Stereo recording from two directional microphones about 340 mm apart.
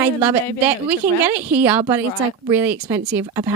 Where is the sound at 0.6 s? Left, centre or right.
Centre.